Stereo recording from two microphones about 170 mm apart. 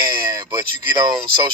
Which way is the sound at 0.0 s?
25° right (ahead or behind).